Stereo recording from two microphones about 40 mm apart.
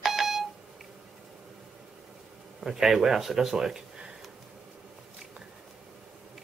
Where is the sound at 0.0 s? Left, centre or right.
Centre.